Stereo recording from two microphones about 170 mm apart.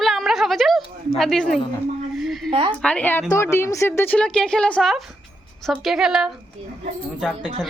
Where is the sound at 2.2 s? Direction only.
Centre (ahead or behind).